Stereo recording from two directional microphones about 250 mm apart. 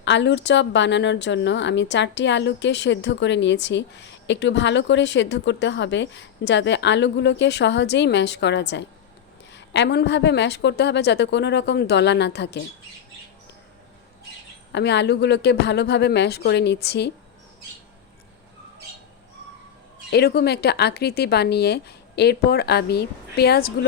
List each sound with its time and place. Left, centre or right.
0.0 s speech: left
14.7 s speech: left
20.1 s a woman's voice: left